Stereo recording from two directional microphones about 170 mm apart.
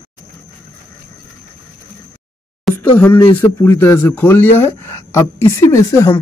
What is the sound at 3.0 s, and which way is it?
Speech, 10° left (ahead or behind).